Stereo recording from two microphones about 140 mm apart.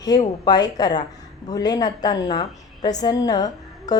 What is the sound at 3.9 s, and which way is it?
Music, 25° left (ahead or behind).